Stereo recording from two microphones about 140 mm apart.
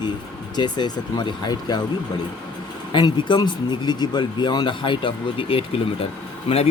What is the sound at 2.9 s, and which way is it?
Speech, 35° left (ahead or behind).